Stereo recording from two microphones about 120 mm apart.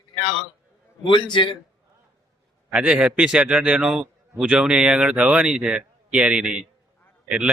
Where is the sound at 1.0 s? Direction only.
40° left (ahead or behind).